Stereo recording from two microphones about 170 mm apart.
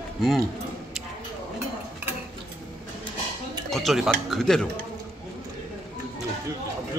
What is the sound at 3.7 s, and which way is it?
Speech, centre (ahead or behind).